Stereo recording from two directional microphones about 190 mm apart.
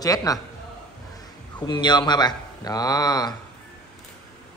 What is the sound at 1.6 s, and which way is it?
A man's voice, 25° left (ahead or behind).